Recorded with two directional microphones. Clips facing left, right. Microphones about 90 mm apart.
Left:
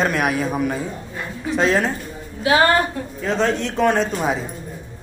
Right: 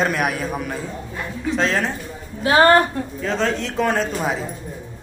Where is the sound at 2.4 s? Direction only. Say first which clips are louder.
Right 2 dB; 40° right (ahead or behind).